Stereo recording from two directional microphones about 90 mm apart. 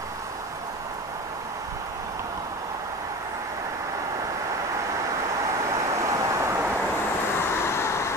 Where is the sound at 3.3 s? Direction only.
40° right (ahead or behind).